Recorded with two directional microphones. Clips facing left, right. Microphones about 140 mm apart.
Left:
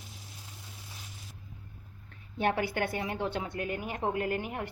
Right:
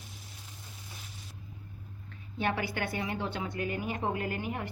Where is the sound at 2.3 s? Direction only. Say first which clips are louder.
Left 3 dB; 50° left (ahead or behind).